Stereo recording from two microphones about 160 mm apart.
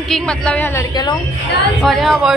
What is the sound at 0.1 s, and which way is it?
A woman's voice, 5° left (ahead or behind).